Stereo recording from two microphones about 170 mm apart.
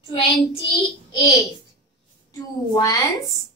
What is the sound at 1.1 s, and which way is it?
A woman's voice, 25° left (ahead or behind).